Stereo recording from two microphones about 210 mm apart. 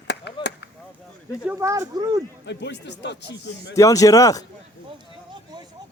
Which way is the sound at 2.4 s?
55° left (ahead or behind).